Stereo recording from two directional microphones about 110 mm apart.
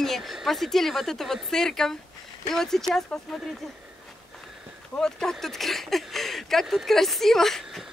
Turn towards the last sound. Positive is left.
turn(degrees=5)  # may be behind; listen again after turning